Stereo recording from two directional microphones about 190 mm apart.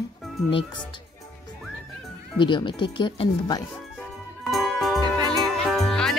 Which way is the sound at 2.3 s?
25° left (ahead or behind).